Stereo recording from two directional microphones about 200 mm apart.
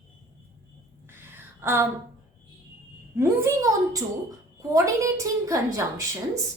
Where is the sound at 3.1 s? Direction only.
15° right (ahead or behind).